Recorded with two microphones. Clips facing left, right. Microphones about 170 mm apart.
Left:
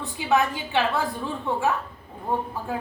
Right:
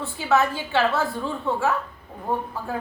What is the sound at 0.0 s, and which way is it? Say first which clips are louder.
A woman's voice: right 1 dB; 15° left (ahead or behind).